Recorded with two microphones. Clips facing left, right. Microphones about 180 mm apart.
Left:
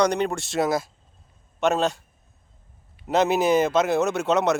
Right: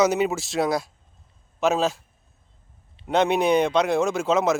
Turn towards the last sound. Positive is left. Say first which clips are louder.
# even
turn(degrees=0)  # may be behind; listen again after turning